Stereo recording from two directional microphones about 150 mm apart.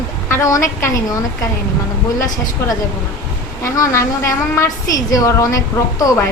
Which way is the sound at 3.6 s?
20° left (ahead or behind).